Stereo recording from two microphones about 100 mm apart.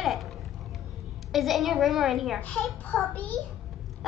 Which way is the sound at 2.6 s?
15° left (ahead or behind).